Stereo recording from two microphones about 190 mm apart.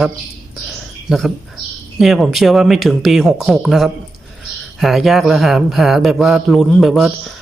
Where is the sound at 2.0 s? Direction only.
Centre (ahead or behind).